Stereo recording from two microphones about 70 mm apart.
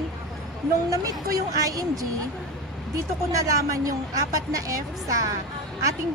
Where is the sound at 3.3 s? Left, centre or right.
Right.